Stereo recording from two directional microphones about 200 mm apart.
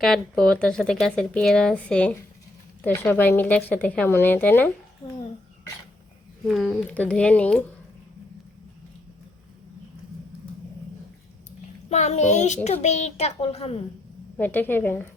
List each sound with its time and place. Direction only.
0.0 s a woman's voice: 5° left (ahead or behind)
5.0 s a child's voice: 20° left (ahead or behind)
6.4 s speech: centre (ahead or behind)
11.9 s a child's voice: 35° left (ahead or behind)
14.3 s a woman's voice: 10° left (ahead or behind)